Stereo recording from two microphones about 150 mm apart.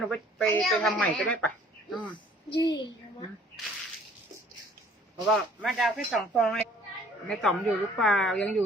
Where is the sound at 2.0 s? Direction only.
30° left (ahead or behind).